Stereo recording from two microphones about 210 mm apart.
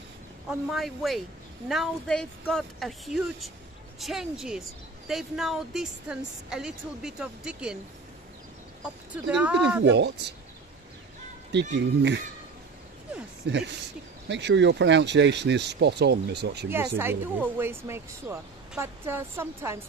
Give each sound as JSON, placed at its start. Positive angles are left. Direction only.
{"t": 0.5, "sound": "a woman's voice", "side_deg": 0}
{"t": 8.8, "sound": "a woman's voice", "side_deg": -5}
{"t": 11.7, "sound": "speech", "side_deg": -55}
{"t": 13.5, "sound": "speech", "side_deg": -55}
{"t": 16.6, "sound": "speech", "side_deg": -10}